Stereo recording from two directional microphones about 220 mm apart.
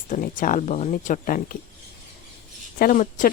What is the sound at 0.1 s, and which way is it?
Speech, 40° left (ahead or behind).